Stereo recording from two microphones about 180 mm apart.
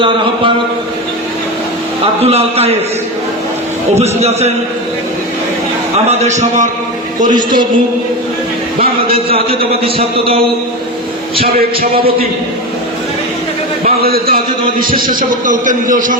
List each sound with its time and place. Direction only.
2.2 s a man's voice: 35° right (ahead or behind)
3.9 s a man's voice: 35° right (ahead or behind)
6.1 s a man's voice: 40° right (ahead or behind)
9.1 s a man's voice: 30° right (ahead or behind)
13.8 s a man's voice: 55° right (ahead or behind)